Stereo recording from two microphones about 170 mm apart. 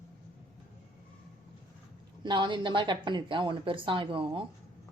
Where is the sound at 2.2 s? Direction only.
25° right (ahead or behind).